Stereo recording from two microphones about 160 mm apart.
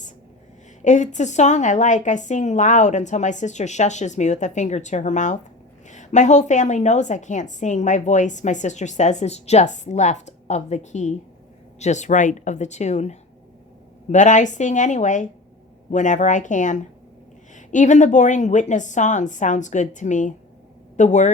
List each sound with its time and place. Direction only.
0.9 s a woman's voice: 50° left (ahead or behind)